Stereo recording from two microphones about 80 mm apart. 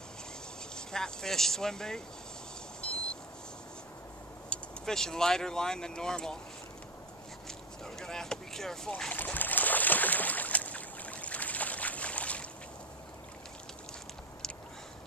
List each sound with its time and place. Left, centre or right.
0.7 s speech: centre
2.8 s vehicle: centre
4.5 s speech: centre
7.4 s a sound: centre
9.1 s boat: left